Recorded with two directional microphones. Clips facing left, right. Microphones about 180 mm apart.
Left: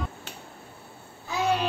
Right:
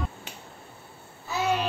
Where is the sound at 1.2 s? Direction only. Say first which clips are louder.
Left 1 dB; centre (ahead or behind).